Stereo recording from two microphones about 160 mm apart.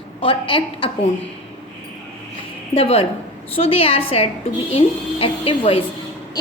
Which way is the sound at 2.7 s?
35° left (ahead or behind).